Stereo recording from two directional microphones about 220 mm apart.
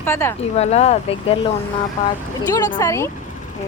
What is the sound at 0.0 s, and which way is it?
Speech, 10° left (ahead or behind).